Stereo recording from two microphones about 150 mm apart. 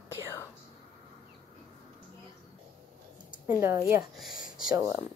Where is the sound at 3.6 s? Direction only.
15° right (ahead or behind).